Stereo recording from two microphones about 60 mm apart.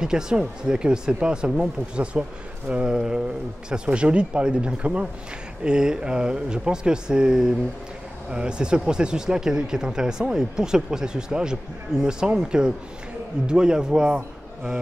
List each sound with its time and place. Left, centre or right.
0.0 s a man's voice: centre